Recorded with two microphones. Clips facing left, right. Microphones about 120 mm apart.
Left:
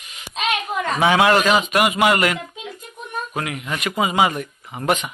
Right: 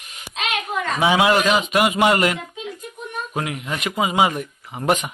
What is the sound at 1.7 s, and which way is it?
Speech, 25° right (ahead or behind).